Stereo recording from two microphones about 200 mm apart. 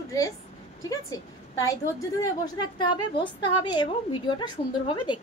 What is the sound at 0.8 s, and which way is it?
A woman's voice, 15° left (ahead or behind).